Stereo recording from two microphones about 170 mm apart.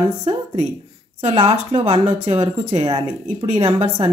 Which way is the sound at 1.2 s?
40° right (ahead or behind).